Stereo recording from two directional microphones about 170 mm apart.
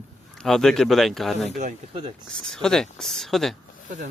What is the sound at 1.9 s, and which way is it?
Speech, 30° right (ahead or behind).